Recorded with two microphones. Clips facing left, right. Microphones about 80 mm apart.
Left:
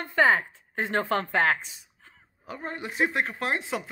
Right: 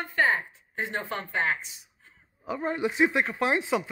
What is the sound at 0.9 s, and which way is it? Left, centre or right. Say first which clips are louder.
Speech: left 7 dB; left.